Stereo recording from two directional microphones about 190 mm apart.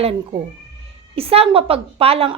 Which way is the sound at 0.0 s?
30° right (ahead or behind).